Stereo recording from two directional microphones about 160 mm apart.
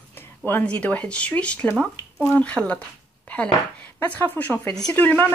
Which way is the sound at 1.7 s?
5° right (ahead or behind).